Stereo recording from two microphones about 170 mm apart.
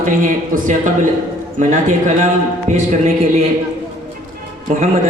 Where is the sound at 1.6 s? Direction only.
45° right (ahead or behind).